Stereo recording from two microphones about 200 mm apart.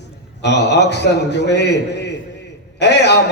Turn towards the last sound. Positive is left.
turn(degrees=60)  # may be behind; listen again after turning